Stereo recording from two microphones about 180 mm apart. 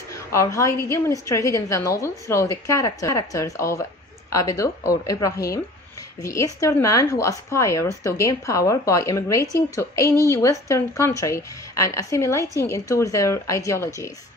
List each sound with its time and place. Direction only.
0.1 s a woman's voice: 15° left (ahead or behind)